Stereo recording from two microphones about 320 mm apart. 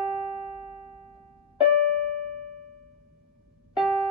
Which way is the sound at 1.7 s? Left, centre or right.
Right.